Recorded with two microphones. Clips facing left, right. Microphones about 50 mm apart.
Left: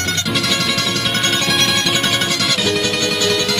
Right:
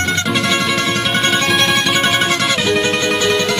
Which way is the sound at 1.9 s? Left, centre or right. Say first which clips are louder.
Right 3 dB; right.